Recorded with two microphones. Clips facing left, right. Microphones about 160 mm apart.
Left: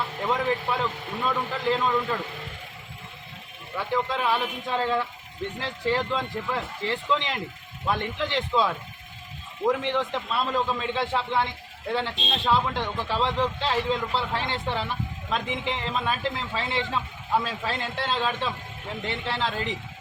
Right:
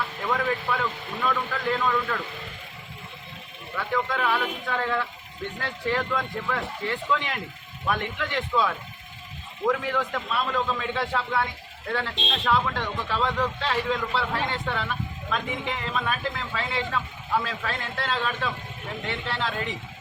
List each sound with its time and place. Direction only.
0.3 s a man's voice: 25° left (ahead or behind)
3.9 s a man's voice: 25° left (ahead or behind)